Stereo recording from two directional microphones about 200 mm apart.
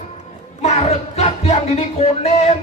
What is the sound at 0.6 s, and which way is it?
A man's voice, 35° left (ahead or behind).